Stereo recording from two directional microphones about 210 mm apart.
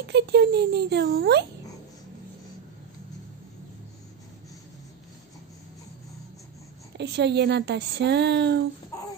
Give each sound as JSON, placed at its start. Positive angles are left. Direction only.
{"t": 0.0, "sound": "speech", "side_deg": -55}
{"t": 7.0, "sound": "speech", "side_deg": -55}